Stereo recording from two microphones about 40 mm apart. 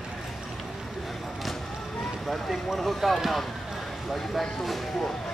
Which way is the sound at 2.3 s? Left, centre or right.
Centre.